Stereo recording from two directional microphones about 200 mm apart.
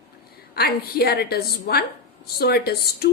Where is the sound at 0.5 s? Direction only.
50° left (ahead or behind).